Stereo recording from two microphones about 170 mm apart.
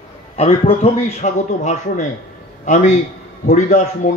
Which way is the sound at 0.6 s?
40° left (ahead or behind).